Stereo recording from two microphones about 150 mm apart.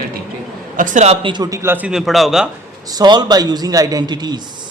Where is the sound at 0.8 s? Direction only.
55° right (ahead or behind).